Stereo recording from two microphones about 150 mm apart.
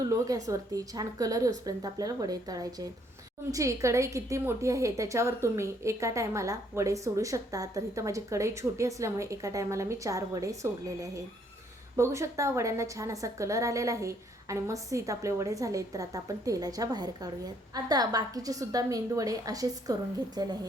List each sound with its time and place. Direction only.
0.0 s a woman's voice: 20° right (ahead or behind)